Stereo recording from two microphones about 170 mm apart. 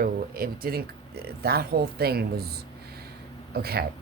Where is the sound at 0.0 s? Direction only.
60° right (ahead or behind).